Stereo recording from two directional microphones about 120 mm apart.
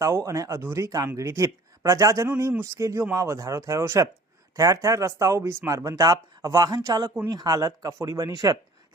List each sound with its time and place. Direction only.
0.0 s speech: 25° right (ahead or behind)